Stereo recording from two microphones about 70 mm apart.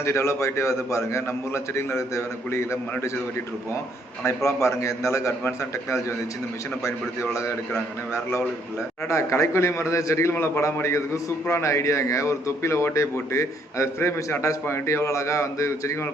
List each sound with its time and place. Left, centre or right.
0.0 s a man's voice: left
4.4 s a man's voice: left